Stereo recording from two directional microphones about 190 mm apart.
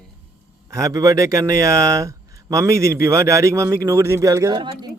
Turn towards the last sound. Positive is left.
turn(degrees=-20)  # may be behind; listen again after turning